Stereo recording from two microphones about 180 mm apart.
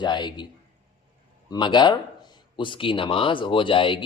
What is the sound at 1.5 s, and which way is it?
Speech, 25° left (ahead or behind).